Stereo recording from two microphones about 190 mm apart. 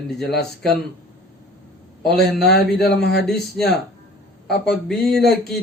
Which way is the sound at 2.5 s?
60° left (ahead or behind).